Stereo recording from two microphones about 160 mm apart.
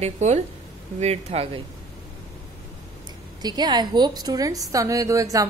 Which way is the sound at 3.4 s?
25° right (ahead or behind).